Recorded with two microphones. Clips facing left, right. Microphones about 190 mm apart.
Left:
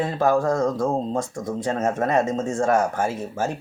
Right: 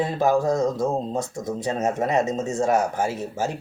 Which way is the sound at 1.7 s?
15° right (ahead or behind).